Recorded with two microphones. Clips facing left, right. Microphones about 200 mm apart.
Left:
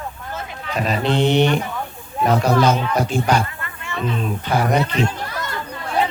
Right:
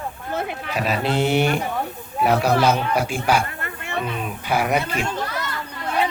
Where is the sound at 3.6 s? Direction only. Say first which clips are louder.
Left 1 dB; 55° right (ahead or behind).